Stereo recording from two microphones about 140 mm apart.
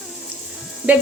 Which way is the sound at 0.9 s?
10° right (ahead or behind).